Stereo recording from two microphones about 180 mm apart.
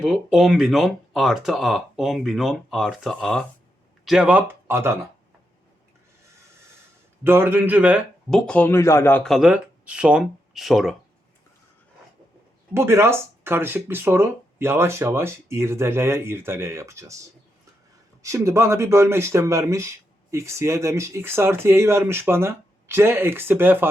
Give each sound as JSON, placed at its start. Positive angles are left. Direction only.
{"t": 0.0, "sound": "speech", "side_deg": -5}
{"t": 7.3, "sound": "speech", "side_deg": -10}
{"t": 9.2, "sound": "speech", "side_deg": 0}
{"t": 12.7, "sound": "speech", "side_deg": -15}
{"t": 18.2, "sound": "speech", "side_deg": -15}